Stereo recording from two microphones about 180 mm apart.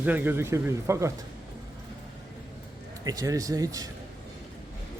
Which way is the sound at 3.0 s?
20° right (ahead or behind).